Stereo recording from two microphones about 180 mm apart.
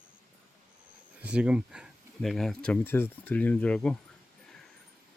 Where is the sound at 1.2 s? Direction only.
5° right (ahead or behind).